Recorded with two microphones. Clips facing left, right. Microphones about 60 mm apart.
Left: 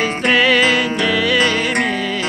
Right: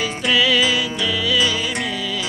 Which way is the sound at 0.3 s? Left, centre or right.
Left.